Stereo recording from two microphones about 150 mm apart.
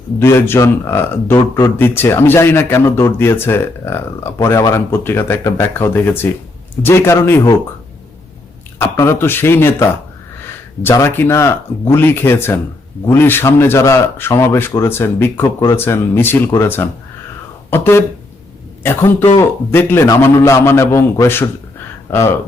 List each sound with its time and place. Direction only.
0.2 s a man's voice: 15° left (ahead or behind)
8.8 s a man's voice: 15° left (ahead or behind)